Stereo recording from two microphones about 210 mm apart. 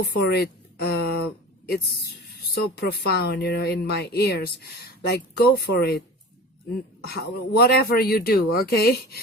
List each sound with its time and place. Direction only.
0.0 s a woman's voice: 55° left (ahead or behind)
7.0 s speech: 50° left (ahead or behind)